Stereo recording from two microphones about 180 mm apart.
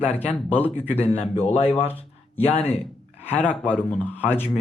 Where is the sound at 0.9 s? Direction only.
35° left (ahead or behind).